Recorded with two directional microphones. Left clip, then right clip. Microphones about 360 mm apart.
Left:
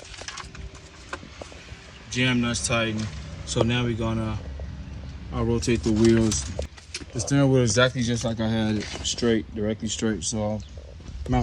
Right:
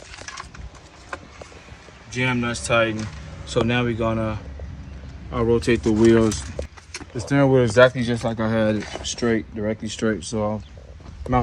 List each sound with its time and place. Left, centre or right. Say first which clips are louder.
2.4 s speech: right 5 dB; centre
9.1 s speech: right 2 dB; right
10.1 s speech: right 6 dB; centre